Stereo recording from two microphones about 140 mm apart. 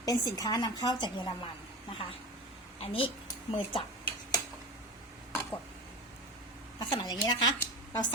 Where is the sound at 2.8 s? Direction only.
40° left (ahead or behind).